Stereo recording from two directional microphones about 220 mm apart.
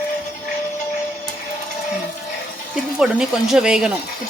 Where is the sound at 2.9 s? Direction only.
5° right (ahead or behind).